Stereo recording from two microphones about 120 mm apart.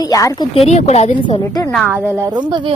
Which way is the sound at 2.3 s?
40° right (ahead or behind).